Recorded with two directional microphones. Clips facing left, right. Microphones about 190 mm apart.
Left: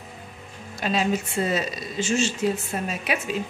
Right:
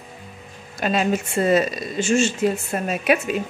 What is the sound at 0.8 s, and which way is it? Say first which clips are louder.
Speech: right 3 dB; 55° right (ahead or behind).